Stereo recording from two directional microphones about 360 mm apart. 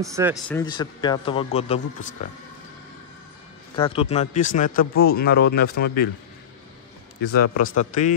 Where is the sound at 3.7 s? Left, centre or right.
Centre.